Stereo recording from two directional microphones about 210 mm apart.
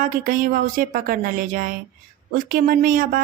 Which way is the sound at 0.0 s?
40° right (ahead or behind).